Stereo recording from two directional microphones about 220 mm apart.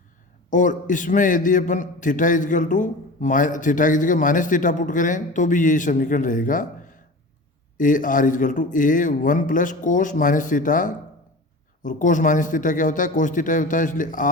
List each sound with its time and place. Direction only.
0.5 s a man's voice: 35° left (ahead or behind)